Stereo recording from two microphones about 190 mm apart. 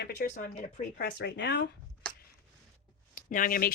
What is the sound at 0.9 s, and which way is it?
Speech, 60° left (ahead or behind).